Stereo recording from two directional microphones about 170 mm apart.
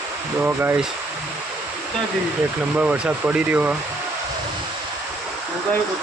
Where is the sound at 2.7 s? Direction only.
10° right (ahead or behind).